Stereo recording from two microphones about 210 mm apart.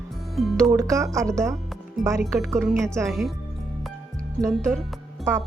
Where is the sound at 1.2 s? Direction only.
15° right (ahead or behind).